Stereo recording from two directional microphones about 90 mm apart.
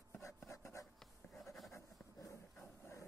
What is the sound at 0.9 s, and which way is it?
Goat, centre (ahead or behind).